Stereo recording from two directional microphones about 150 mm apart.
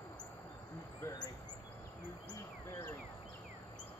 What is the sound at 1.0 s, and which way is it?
Bird, 25° left (ahead or behind).